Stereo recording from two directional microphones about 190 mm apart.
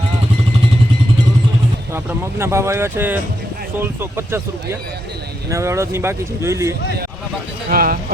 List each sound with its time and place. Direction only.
1.9 s speech: 15° right (ahead or behind)
7.7 s speech: 50° right (ahead or behind)